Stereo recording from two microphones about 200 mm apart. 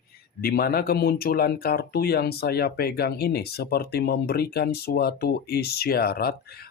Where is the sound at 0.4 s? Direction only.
50° left (ahead or behind).